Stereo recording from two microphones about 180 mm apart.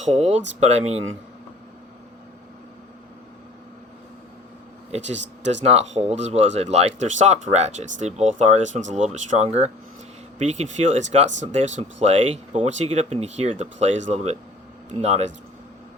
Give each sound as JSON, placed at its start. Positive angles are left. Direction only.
{"t": 0.0, "sound": "speech", "side_deg": -35}
{"t": 4.9, "sound": "speech", "side_deg": -40}